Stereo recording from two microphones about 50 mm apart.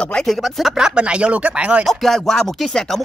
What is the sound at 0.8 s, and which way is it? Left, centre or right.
Speech, centre.